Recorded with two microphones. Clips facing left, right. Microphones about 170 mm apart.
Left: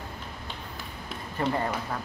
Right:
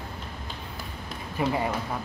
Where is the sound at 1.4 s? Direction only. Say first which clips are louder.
Right 1 dB; 10° right (ahead or behind).